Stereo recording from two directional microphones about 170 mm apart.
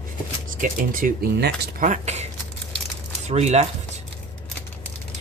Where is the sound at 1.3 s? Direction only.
70° right (ahead or behind).